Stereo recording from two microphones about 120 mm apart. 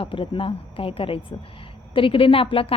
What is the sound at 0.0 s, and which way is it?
A woman's voice, 45° left (ahead or behind).